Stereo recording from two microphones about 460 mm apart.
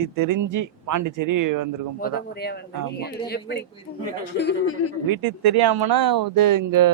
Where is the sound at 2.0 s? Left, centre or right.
Centre.